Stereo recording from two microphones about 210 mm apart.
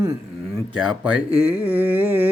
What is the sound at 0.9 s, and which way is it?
Speech, 5° right (ahead or behind).